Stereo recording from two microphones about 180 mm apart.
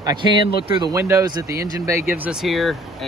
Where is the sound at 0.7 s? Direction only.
20° right (ahead or behind).